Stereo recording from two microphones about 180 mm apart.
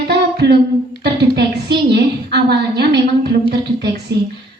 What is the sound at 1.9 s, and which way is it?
A woman's voice, 65° right (ahead or behind).